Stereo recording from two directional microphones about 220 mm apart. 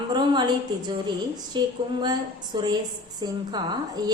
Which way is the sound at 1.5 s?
20° right (ahead or behind).